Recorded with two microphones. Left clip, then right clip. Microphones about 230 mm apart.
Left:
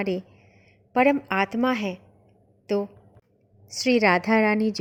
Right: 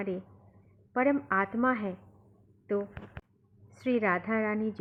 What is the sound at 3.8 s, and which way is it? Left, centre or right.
Speech, left.